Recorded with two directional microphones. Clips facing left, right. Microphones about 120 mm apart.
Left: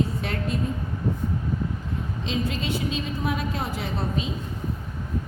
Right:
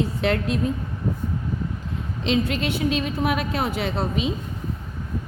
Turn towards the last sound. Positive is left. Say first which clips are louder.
# right 4 dB
turn(degrees=-75)  # may be behind; listen again after turning